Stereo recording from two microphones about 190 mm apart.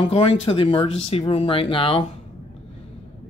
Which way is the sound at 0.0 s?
30° left (ahead or behind).